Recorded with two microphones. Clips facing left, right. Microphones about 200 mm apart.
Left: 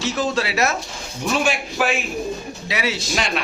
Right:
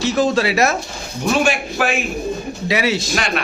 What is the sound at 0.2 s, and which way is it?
A man's voice, 50° right (ahead or behind).